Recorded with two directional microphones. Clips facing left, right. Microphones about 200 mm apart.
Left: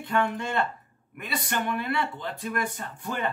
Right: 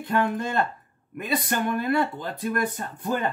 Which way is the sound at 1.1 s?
45° right (ahead or behind).